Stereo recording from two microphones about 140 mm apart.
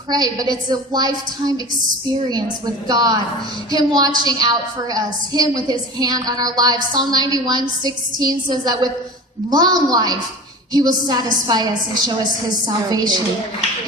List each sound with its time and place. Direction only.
0.1 s a woman's voice: 30° right (ahead or behind)
2.8 s a woman's voice: 30° right (ahead or behind)